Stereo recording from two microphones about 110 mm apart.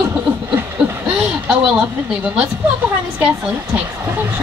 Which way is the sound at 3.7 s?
20° right (ahead or behind).